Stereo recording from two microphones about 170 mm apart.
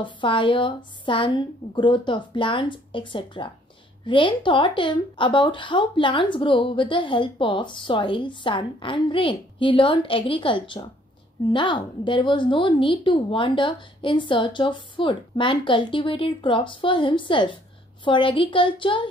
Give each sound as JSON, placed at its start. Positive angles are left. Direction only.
{"t": 0.0, "sound": "a woman's voice", "side_deg": 30}